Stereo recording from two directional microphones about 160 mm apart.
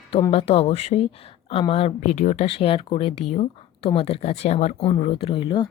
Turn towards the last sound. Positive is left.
turn(degrees=30)  # may be behind; listen again after turning